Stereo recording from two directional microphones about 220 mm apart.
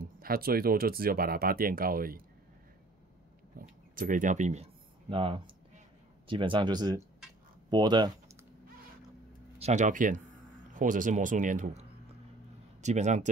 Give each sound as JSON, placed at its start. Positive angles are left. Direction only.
{"t": 0.0, "sound": "speech", "side_deg": -40}
{"t": 3.5, "sound": "speech", "side_deg": -40}
{"t": 9.6, "sound": "speech", "side_deg": -30}
{"t": 12.8, "sound": "speech", "side_deg": -30}